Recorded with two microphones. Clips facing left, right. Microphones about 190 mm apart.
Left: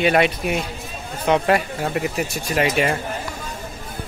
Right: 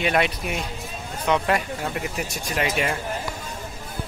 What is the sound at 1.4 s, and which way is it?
Speech, 65° left (ahead or behind).